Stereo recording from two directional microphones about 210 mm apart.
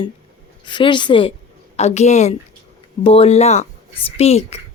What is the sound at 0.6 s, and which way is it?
A woman's voice, 20° left (ahead or behind).